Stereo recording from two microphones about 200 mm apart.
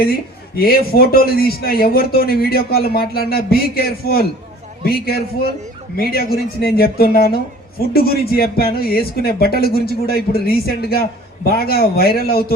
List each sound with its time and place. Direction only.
0.5 s speech: 50° left (ahead or behind)